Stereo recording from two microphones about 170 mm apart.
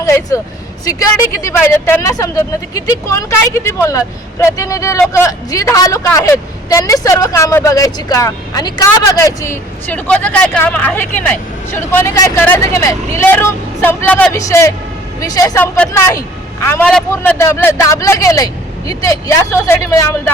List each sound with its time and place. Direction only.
0.9 s speech: 20° left (ahead or behind)